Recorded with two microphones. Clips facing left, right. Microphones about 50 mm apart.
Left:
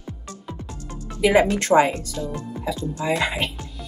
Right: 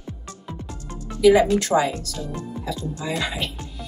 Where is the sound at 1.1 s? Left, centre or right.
Left.